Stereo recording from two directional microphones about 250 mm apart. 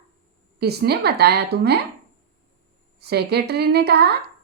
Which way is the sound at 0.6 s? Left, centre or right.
Right.